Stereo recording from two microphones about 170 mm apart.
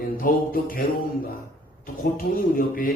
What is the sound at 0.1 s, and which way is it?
Speech, 55° left (ahead or behind).